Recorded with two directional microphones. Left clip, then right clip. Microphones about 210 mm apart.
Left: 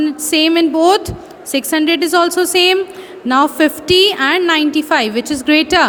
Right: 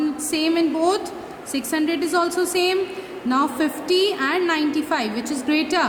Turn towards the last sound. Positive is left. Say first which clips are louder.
# left 9 dB
turn(degrees=40)  # may be behind; listen again after turning